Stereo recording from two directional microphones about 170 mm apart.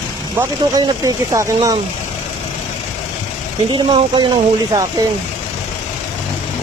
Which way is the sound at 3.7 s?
30° right (ahead or behind).